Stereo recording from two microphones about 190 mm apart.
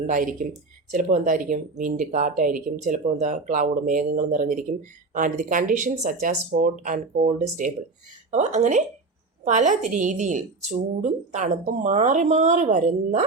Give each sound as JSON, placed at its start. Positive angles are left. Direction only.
{"t": 0.1, "sound": "a woman's voice", "side_deg": -45}